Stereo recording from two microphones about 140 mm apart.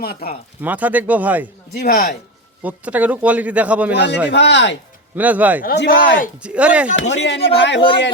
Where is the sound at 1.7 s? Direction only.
90° left.